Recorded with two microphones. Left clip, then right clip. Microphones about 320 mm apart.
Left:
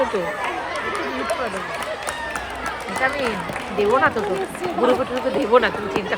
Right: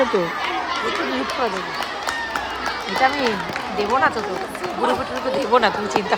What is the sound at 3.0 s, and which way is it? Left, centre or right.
Speech, centre.